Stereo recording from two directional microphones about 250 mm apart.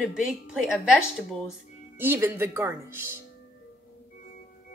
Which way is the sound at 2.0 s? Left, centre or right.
Centre.